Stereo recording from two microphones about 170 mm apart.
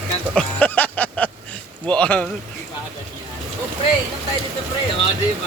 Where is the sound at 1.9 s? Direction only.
5° left (ahead or behind).